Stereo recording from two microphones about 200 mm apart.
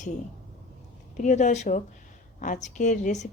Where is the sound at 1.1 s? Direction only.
35° left (ahead or behind).